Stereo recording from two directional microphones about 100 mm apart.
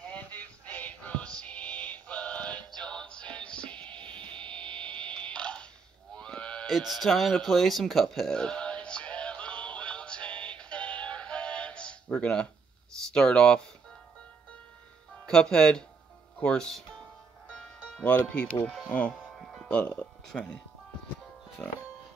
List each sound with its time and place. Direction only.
0.1 s music: 15° left (ahead or behind)
6.1 s a sound: 10° left (ahead or behind)
6.7 s speech: centre (ahead or behind)
7.4 s music: centre (ahead or behind)
13.1 s speech: 10° left (ahead or behind)
15.2 s speech: 10° left (ahead or behind)
17.5 s music: 10° left (ahead or behind)
18.1 s speech: 15° left (ahead or behind)
19.3 s music: centre (ahead or behind)
19.7 s speech: 15° left (ahead or behind)
21.6 s music: 20° left (ahead or behind)